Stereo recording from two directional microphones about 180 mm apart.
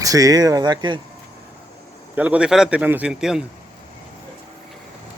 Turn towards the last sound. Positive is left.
turn(degrees=-5)  # may be behind; listen again after turning